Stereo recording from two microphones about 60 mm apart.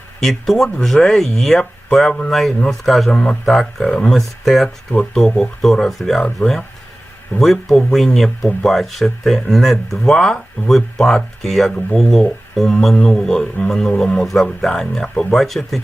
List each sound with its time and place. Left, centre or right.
0.2 s speech: centre
4.1 s speech: centre
4.9 s speech: centre
5.2 s speech: centre
7.3 s speech: centre
15.4 s speech: centre